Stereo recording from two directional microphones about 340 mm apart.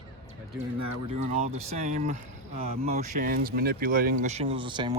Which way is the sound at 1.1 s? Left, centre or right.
Centre.